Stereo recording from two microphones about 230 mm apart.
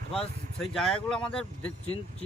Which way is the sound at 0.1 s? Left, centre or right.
Centre.